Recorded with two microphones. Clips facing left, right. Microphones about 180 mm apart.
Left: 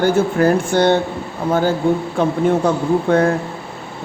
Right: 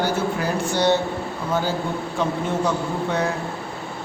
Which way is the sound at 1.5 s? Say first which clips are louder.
Left 9 dB; 55° left (ahead or behind).